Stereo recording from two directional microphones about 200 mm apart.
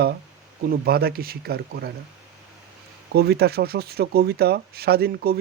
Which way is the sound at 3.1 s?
55° right (ahead or behind).